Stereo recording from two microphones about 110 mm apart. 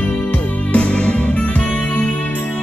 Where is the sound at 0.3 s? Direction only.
10° left (ahead or behind).